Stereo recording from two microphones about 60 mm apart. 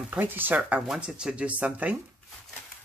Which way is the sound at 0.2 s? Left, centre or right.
Right.